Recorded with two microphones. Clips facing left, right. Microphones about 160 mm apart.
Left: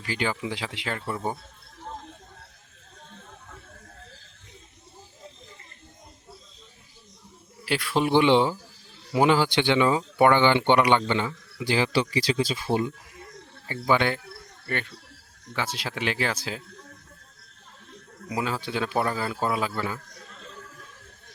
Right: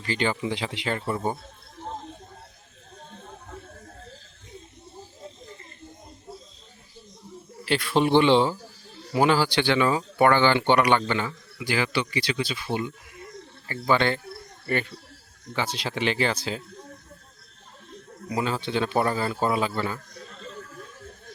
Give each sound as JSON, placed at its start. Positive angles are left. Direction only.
{"t": 0.0, "sound": "a man's voice", "side_deg": 5}
{"t": 3.2, "sound": "a sound", "side_deg": -35}
{"t": 7.6, "sound": "a man's voice", "side_deg": 5}
{"t": 11.6, "sound": "speech", "side_deg": 30}
{"t": 13.7, "sound": "a man's voice", "side_deg": 15}
{"t": 14.7, "sound": "a man's voice", "side_deg": -5}
{"t": 18.3, "sound": "a man's voice", "side_deg": 5}